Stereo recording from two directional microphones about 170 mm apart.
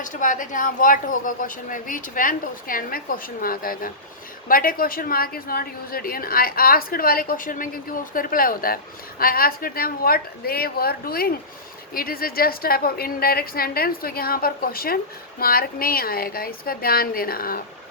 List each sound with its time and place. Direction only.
0.0 s a woman's voice: 50° left (ahead or behind)